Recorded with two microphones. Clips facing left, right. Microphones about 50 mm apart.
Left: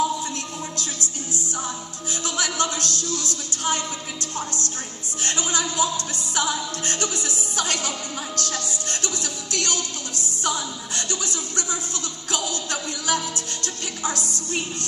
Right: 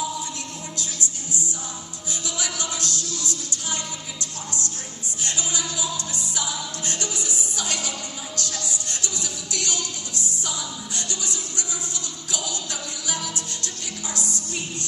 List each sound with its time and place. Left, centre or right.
2.2 s music: left